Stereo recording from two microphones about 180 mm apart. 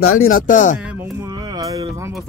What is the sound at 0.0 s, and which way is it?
Speech, 50° left (ahead or behind).